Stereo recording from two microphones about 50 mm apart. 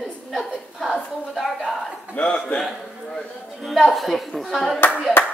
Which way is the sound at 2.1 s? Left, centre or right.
Left.